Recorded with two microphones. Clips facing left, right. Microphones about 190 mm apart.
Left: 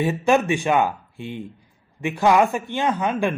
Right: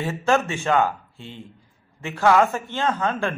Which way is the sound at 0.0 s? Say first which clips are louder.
Left 3 dB; 15° left (ahead or behind).